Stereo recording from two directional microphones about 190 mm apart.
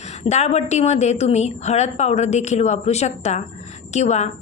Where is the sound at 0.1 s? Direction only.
35° left (ahead or behind).